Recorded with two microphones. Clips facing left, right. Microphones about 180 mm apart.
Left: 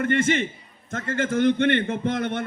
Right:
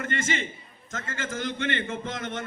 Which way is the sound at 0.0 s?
60° left (ahead or behind).